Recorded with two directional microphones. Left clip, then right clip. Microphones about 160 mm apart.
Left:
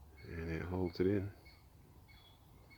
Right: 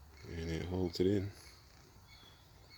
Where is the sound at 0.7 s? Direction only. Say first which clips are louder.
Right 1 dB; 5° left (ahead or behind).